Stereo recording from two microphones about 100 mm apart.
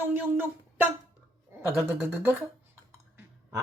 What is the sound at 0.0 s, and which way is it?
Speech, 20° right (ahead or behind).